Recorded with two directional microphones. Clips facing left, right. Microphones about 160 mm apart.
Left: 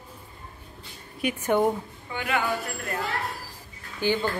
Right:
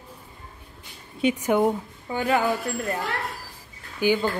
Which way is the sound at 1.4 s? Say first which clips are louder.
Even; 5° right (ahead or behind).